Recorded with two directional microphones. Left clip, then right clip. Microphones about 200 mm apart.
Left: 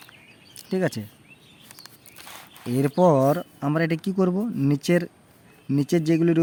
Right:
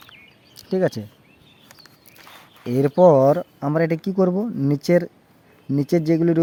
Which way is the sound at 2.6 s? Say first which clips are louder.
Right 6 dB; 5° right (ahead or behind).